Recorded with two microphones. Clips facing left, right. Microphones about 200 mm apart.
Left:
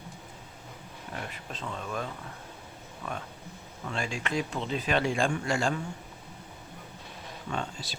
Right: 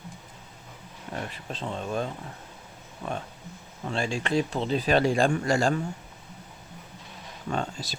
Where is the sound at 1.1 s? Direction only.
30° right (ahead or behind).